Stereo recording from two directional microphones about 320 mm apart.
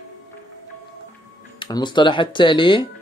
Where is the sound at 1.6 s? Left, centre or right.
Centre.